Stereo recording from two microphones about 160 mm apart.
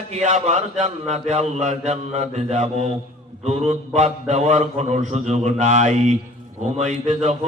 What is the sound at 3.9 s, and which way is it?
A man's voice, 45° right (ahead or behind).